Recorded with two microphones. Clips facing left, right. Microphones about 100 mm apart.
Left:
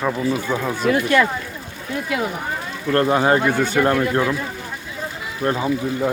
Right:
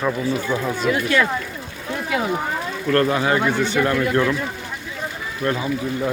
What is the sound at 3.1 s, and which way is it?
Speech, 35° left (ahead or behind).